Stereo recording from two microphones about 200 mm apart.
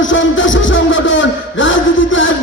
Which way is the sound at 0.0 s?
70° left (ahead or behind).